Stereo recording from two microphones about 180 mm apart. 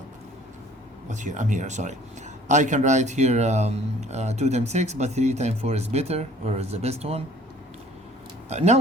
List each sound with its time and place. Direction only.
1.0 s speech: 45° right (ahead or behind)
8.4 s speech: 40° right (ahead or behind)